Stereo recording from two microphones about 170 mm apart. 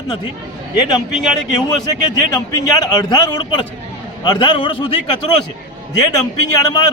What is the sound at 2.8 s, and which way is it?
A man's voice, 25° left (ahead or behind).